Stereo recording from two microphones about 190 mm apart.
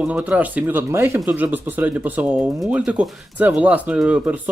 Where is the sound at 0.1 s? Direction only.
5° right (ahead or behind).